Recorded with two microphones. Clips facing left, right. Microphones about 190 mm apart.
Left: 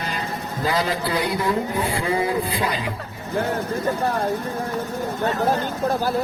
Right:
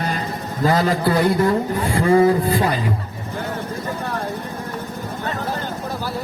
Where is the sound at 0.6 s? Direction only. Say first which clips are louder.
Right 6 dB; 45° right (ahead or behind).